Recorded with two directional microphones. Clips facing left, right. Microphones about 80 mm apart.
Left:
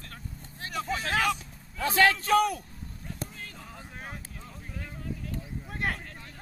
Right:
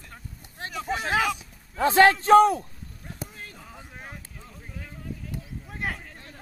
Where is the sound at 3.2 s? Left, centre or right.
Centre.